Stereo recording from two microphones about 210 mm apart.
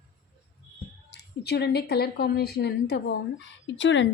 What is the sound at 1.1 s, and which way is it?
A woman's voice, 50° left (ahead or behind).